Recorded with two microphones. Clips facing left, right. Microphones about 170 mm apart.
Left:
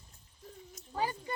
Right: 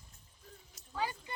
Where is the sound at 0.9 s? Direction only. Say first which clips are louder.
Left 3 dB; 40° left (ahead or behind).